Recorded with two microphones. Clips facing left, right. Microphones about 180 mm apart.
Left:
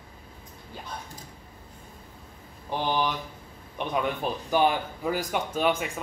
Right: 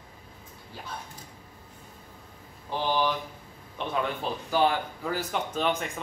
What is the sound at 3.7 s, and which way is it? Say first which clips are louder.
Speech: left 2 dB; 15° left (ahead or behind).